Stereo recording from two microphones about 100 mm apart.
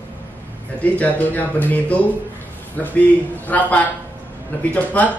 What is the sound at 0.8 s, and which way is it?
Speech, 15° left (ahead or behind).